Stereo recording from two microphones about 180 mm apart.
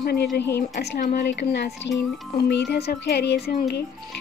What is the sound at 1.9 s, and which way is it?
Speech, 75° left (ahead or behind).